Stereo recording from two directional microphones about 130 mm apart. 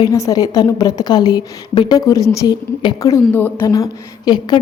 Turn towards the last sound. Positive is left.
turn(degrees=35)  # may be behind; listen again after turning